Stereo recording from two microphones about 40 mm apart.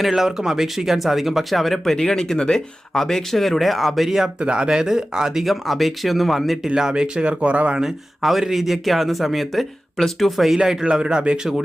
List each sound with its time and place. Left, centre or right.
0.0 s speech: centre
4.4 s speech: right
5.4 s speech: centre
6.7 s speech: centre; by 7.7 s right
7.9 s speech: centre
11.0 s speech: right